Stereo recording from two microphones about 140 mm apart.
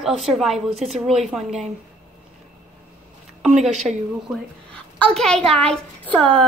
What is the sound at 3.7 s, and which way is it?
Speech, 55° right (ahead or behind).